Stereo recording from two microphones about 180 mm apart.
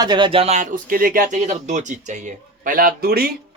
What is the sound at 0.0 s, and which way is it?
Speech, 25° right (ahead or behind).